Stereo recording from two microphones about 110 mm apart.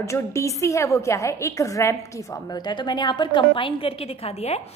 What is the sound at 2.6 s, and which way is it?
A woman's voice, 45° left (ahead or behind).